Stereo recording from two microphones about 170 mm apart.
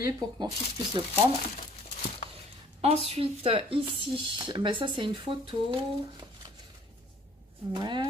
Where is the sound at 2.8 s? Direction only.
35° right (ahead or behind).